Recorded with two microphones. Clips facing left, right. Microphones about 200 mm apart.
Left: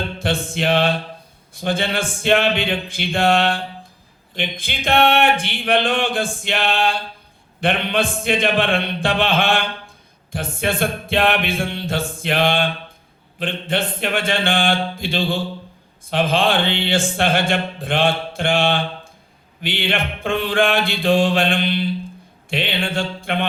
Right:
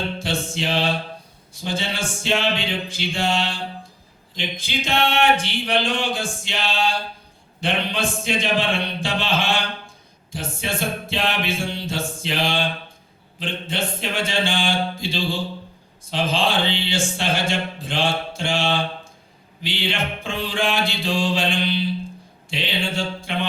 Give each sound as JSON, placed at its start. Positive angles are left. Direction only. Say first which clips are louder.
{"t": 0.2, "sound": "music", "louder": "left 4 dB", "side_deg": 55}
{"t": 22.4, "sound": "mantra", "louder": "left 3 dB", "side_deg": 60}